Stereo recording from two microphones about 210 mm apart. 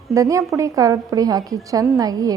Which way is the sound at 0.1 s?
15° right (ahead or behind).